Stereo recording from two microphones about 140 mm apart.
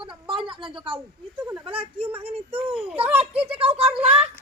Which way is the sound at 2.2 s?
45° right (ahead or behind).